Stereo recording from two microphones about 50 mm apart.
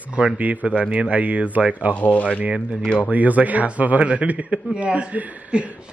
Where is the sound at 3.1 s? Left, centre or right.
Right.